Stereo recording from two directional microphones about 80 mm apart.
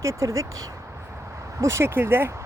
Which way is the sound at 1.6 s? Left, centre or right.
Right.